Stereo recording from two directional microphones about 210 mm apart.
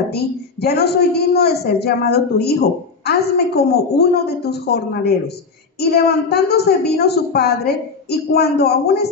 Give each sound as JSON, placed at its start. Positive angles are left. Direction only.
{"t": 0.1, "sound": "a woman's voice", "side_deg": 50}